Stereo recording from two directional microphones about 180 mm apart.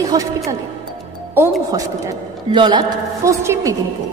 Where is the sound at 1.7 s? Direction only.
20° right (ahead or behind).